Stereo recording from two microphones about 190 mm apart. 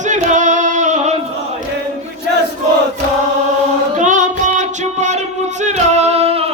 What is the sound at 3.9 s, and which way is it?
Music, 40° right (ahead or behind).